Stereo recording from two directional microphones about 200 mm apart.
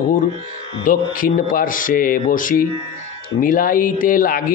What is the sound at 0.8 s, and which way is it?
Mantra, 45° left (ahead or behind).